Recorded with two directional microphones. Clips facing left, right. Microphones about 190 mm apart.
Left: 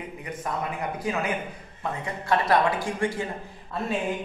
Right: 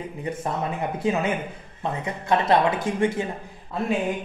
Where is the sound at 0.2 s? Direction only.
25° right (ahead or behind).